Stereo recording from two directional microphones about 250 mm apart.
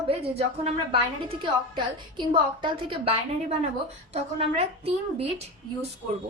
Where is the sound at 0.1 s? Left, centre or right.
Right.